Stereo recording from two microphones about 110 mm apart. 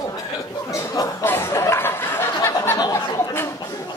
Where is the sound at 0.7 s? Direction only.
25° left (ahead or behind).